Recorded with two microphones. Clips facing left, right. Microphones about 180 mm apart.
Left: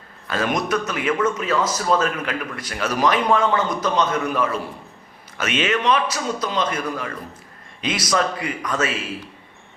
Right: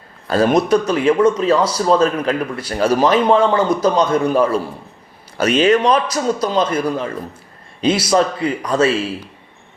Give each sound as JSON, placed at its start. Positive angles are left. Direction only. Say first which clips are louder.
{"t": 0.3, "sound": "speech", "louder": "right 8 dB", "side_deg": -35}